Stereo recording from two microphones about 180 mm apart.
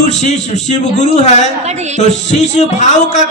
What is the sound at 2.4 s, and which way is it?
Speech, 40° left (ahead or behind).